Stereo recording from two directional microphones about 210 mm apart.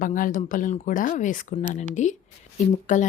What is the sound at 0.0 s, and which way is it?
Speech, 40° left (ahead or behind).